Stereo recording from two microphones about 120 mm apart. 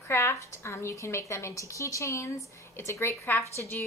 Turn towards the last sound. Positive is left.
turn(degrees=20)  # may be behind; listen again after turning